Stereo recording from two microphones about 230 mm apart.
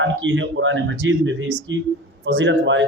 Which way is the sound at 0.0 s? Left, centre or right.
Right.